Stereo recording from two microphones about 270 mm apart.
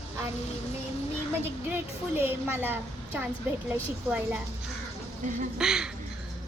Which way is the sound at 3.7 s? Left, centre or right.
Centre.